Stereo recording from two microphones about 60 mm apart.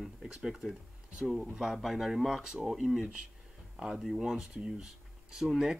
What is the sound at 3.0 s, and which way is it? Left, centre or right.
Speech, centre.